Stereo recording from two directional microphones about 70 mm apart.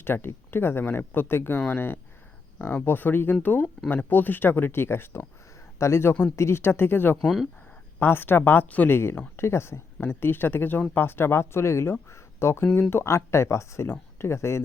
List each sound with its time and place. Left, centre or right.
0.0 s speech: left
9.0 s speech: left